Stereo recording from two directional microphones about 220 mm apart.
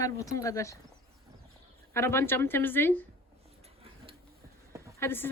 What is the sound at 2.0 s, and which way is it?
Speech, 10° left (ahead or behind).